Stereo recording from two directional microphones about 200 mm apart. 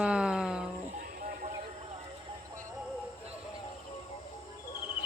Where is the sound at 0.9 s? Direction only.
45° right (ahead or behind).